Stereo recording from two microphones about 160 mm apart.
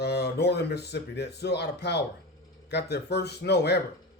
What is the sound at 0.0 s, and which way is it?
Speech, 90° left.